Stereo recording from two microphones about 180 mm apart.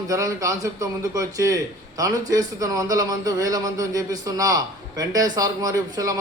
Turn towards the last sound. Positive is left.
turn(degrees=-20)  # may be behind; listen again after turning